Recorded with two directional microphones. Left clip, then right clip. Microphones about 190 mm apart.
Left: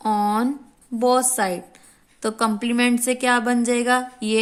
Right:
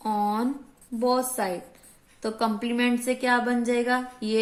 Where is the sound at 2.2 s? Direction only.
45° left (ahead or behind).